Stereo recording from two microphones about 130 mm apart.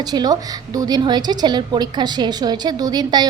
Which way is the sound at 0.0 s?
30° right (ahead or behind).